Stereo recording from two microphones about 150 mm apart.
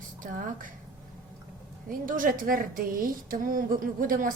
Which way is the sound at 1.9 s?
65° right (ahead or behind).